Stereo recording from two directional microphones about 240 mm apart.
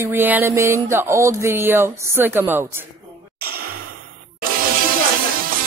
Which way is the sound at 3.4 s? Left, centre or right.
Right.